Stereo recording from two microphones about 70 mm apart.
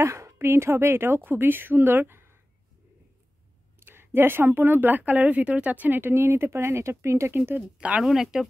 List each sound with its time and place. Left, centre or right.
0.0 s a woman's voice: right
3.8 s a woman's voice: right
7.3 s speech: right
8.0 s speech: centre